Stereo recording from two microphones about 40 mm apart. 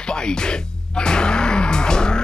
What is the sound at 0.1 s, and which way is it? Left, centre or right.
Music, left.